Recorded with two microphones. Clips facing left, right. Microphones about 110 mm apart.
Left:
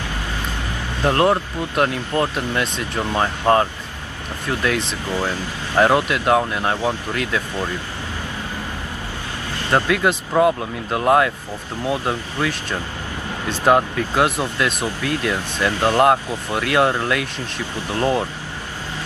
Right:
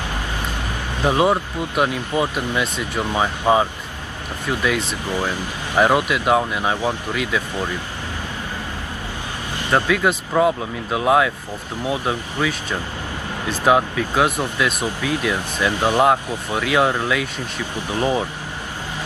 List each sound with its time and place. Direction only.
1.0 s speech: 10° right (ahead or behind)
9.6 s vehicle: 15° right (ahead or behind)
9.8 s speech: centre (ahead or behind); by 16.0 s 15° right (ahead or behind)
16.6 s speech: centre (ahead or behind)
17.7 s speech: 10° right (ahead or behind)